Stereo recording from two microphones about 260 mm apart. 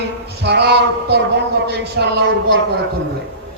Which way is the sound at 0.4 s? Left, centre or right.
Right.